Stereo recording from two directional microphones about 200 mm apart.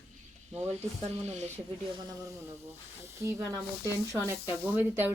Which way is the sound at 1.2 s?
35° right (ahead or behind).